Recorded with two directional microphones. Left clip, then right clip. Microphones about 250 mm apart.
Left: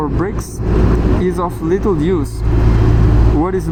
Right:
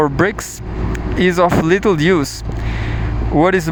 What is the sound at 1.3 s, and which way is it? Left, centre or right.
Speech, right.